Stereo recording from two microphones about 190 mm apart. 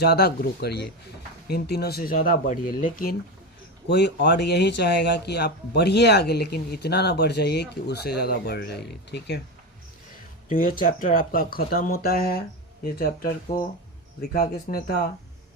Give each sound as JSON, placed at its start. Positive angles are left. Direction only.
{"t": 0.0, "sound": "speech", "side_deg": 55}
{"t": 3.8, "sound": "speech", "side_deg": 60}
{"t": 10.5, "sound": "speech", "side_deg": 45}
{"t": 14.5, "sound": "speech", "side_deg": 55}